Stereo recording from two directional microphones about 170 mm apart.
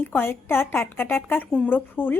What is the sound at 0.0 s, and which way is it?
A woman's voice, 10° left (ahead or behind).